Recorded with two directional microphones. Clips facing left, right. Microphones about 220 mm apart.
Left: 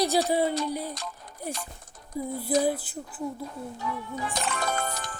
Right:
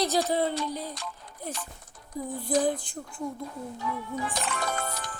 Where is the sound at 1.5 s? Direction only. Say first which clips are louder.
Left 2 dB; 40° left (ahead or behind).